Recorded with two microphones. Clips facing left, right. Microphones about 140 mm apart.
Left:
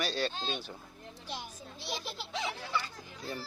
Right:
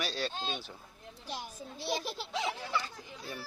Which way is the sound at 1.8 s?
45° right (ahead or behind).